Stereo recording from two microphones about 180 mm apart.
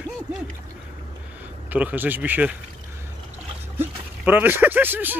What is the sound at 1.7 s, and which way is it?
Speech, 10° right (ahead or behind).